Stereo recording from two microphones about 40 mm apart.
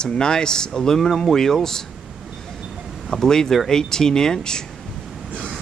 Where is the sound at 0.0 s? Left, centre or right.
Centre.